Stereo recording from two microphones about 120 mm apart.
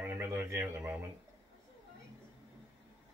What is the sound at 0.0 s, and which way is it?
Radio, 20° right (ahead or behind).